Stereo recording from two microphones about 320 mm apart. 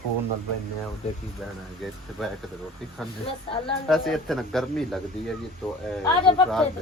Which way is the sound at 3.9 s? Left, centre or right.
Centre.